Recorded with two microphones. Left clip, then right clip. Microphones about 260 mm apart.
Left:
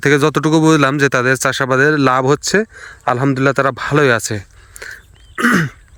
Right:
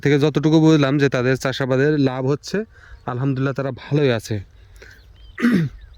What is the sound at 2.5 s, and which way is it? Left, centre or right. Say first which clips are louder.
Speech: left 10 dB; left.